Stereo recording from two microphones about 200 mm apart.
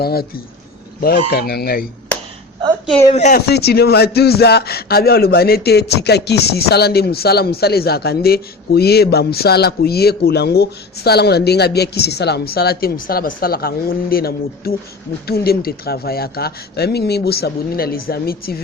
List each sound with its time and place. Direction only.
0.0 s a man's voice: 50° left (ahead or behind)
3.1 s speech: 35° left (ahead or behind)
3.3 s a man's voice: 55° left (ahead or behind)